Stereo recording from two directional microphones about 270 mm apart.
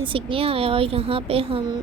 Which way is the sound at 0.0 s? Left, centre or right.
Centre.